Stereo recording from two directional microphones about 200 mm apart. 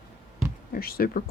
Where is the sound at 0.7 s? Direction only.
50° left (ahead or behind).